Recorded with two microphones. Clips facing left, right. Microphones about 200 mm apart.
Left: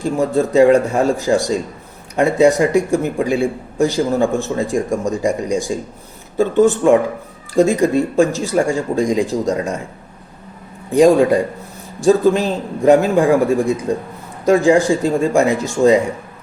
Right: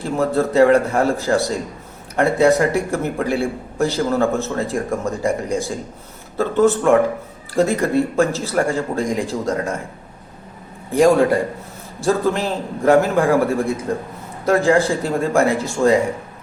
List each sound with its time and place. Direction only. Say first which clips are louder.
0.0 s a man's voice: left 2 dB; 15° left (ahead or behind)
10.9 s a man's voice: left 3 dB; 15° left (ahead or behind)
14.4 s a man's voice: left 3 dB; 15° left (ahead or behind)